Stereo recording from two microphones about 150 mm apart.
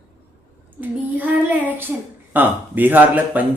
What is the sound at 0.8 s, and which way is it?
Child singing, 10° right (ahead or behind).